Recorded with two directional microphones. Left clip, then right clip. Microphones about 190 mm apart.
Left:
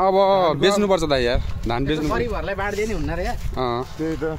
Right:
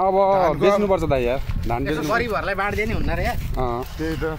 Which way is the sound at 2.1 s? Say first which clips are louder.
Right 3 dB; 40° right (ahead or behind).